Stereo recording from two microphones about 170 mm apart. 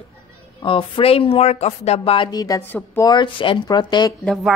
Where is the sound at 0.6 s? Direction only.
30° left (ahead or behind); by 3.0 s 10° left (ahead or behind).